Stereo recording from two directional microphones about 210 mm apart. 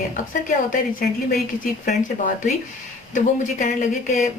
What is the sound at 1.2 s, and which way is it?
Speech, 40° left (ahead or behind).